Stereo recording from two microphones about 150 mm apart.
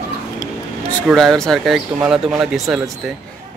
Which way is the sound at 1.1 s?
Centre (ahead or behind).